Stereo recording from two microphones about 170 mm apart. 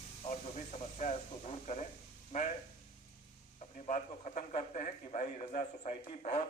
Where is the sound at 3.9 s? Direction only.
45° left (ahead or behind).